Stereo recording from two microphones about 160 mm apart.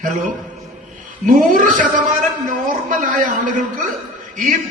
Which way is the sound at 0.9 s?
55° right (ahead or behind).